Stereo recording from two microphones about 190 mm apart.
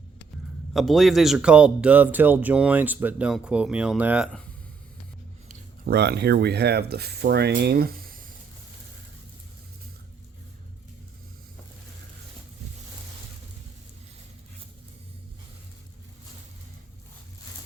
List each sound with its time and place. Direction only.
0.7 s speech: centre (ahead or behind)
5.5 s speech: 55° right (ahead or behind)